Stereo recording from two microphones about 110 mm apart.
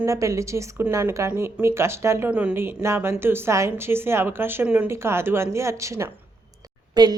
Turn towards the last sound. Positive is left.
turn(degrees=-40)  # may be behind; listen again after turning